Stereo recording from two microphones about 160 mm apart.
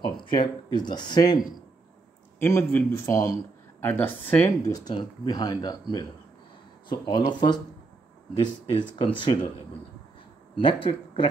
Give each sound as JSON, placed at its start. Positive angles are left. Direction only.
{"t": 0.2, "sound": "speech", "side_deg": 30}
{"t": 2.3, "sound": "speech", "side_deg": 15}
{"t": 4.7, "sound": "speech", "side_deg": 30}
{"t": 8.9, "sound": "speech", "side_deg": 30}
{"t": 10.5, "sound": "speech", "side_deg": 30}